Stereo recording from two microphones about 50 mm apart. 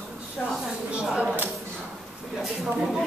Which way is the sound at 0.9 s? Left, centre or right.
Right.